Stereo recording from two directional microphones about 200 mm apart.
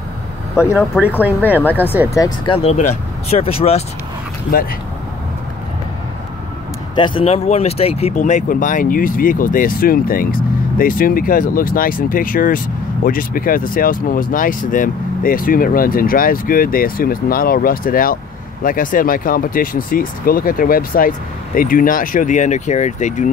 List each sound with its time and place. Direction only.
0.7 s speech: 5° right (ahead or behind)
2.1 s speech: 20° left (ahead or behind)
7.0 s speech: 30° left (ahead or behind)